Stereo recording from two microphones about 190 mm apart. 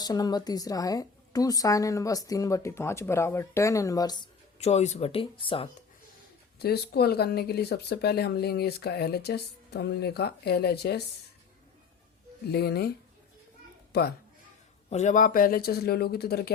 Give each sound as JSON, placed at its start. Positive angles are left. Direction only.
{"t": 0.0, "sound": "a woman's voice", "side_deg": 20}
{"t": 6.6, "sound": "speech", "side_deg": 55}
{"t": 12.5, "sound": "speech", "side_deg": 55}
{"t": 13.9, "sound": "speech", "side_deg": 60}
{"t": 14.8, "sound": "speech", "side_deg": 35}